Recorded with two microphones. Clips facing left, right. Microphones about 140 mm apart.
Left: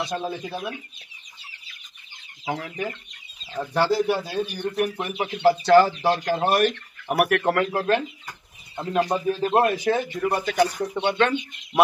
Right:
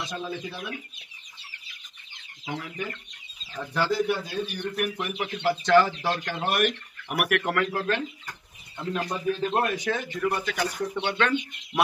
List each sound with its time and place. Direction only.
0.0 s speech: 35° left (ahead or behind)
2.5 s speech: 45° left (ahead or behind)
9.1 s a man's voice: 30° left (ahead or behind)